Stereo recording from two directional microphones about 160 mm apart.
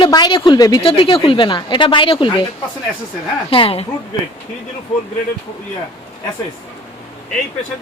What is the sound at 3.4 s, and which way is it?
Speech, 35° left (ahead or behind).